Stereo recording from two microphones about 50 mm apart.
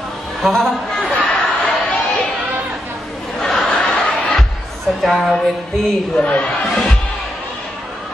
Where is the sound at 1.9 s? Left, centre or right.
Left.